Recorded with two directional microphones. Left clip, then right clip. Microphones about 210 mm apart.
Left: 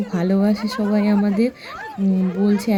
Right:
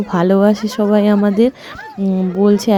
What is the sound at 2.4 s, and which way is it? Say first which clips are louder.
Speech: right 9 dB; 30° right (ahead or behind).